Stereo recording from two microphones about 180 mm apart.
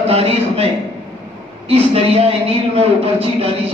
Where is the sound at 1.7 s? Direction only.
35° right (ahead or behind).